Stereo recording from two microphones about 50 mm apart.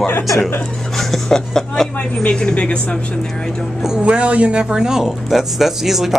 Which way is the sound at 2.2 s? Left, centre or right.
Left.